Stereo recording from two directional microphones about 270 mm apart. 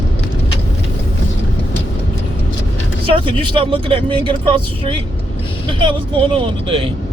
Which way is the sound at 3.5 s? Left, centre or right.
Centre.